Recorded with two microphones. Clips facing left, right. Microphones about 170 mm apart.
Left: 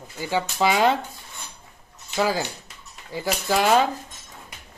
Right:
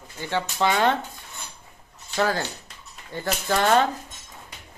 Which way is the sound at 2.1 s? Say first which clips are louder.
Left 1 dB; 10° left (ahead or behind).